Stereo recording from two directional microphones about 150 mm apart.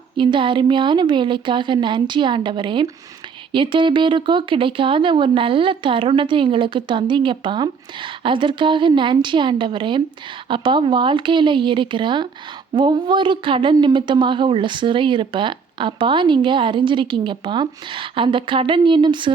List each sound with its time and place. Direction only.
0.2 s a woman's voice: 35° right (ahead or behind)